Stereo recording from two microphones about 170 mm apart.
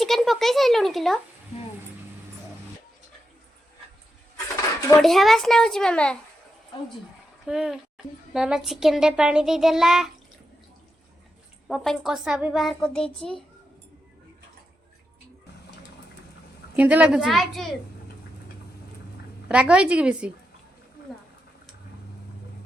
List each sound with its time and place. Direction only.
0.0 s speech: centre (ahead or behind)
5.0 s a child's voice: centre (ahead or behind)
7.4 s a child's voice: 5° right (ahead or behind)
11.7 s a child's voice: centre (ahead or behind)
16.7 s a child's voice: 10° right (ahead or behind)
19.5 s a woman's voice: 5° right (ahead or behind)